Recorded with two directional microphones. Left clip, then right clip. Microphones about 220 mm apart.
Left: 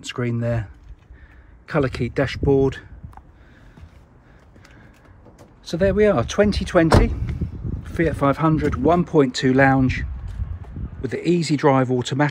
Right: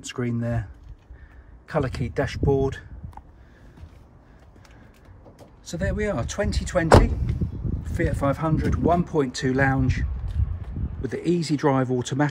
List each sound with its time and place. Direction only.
0.0 s speech: 10° right (ahead or behind)
1.7 s speech: 5° right (ahead or behind)
5.4 s speech: 5° right (ahead or behind)